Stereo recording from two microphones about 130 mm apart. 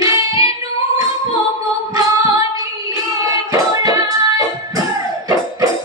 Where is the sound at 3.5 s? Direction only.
30° right (ahead or behind).